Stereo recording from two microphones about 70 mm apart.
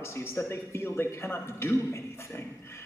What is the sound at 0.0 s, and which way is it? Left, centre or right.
A man's voice, left.